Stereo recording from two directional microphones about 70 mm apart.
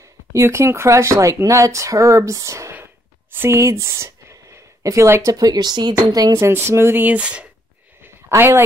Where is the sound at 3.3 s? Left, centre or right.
Right.